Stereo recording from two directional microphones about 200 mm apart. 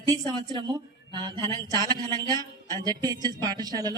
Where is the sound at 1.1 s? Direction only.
20° right (ahead or behind).